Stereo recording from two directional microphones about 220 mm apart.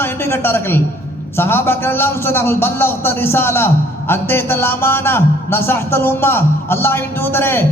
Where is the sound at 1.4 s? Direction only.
10° left (ahead or behind).